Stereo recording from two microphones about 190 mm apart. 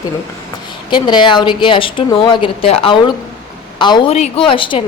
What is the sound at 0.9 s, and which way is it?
A woman's voice, 25° left (ahead or behind).